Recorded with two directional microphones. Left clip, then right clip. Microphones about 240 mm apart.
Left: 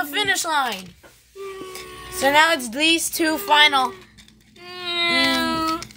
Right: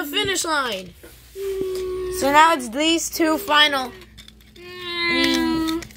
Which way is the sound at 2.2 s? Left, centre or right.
Centre.